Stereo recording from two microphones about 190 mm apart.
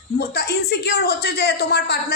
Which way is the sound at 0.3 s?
60° left (ahead or behind).